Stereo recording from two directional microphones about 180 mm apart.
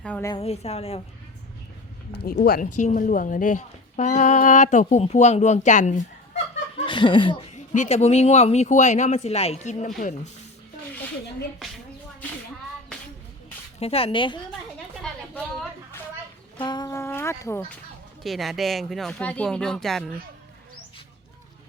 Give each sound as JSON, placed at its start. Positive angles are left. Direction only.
{"t": 0.3, "sound": "speech", "side_deg": 35}
{"t": 2.2, "sound": "a woman's voice", "side_deg": 55}
{"t": 6.8, "sound": "speech", "side_deg": 25}
{"t": 7.5, "sound": "speech", "side_deg": 40}
{"t": 13.7, "sound": "speech", "side_deg": 35}
{"t": 16.6, "sound": "a sound", "side_deg": 25}
{"t": 18.2, "sound": "speech", "side_deg": 0}